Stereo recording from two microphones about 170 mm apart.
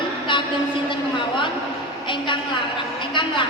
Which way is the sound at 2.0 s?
30° left (ahead or behind).